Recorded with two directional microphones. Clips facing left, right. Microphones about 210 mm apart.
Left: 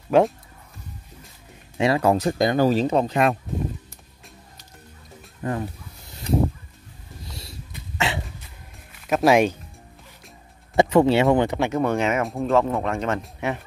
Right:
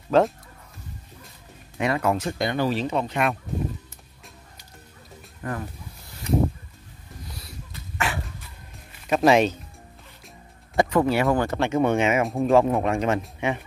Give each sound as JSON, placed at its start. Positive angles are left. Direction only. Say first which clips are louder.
{"t": 0.1, "sound": "speech", "louder": "left 2 dB", "side_deg": 15}
{"t": 1.8, "sound": "speech", "louder": "left 4 dB", "side_deg": 30}
{"t": 5.4, "sound": "speech", "louder": "left 4 dB", "side_deg": 25}
{"t": 7.2, "sound": "dog", "louder": "left 3 dB", "side_deg": 25}
{"t": 9.0, "sound": "speech", "louder": "left 1 dB", "side_deg": 5}
{"t": 10.8, "sound": "speech", "louder": "left 4 dB", "side_deg": 25}
{"t": 11.3, "sound": "speech", "louder": "left 3 dB", "side_deg": 15}
{"t": 11.7, "sound": "speech", "louder": "right 1 dB", "side_deg": 0}
{"t": 12.4, "sound": "speech", "louder": "right 3 dB", "side_deg": -15}
{"t": 13.2, "sound": "speech", "louder": "right 1 dB", "side_deg": 0}